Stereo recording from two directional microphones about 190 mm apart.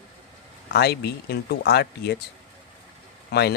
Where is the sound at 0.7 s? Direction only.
55° left (ahead or behind).